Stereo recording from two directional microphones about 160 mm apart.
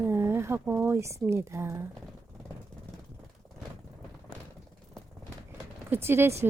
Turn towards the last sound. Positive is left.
turn(degrees=-15)  # may be behind; listen again after turning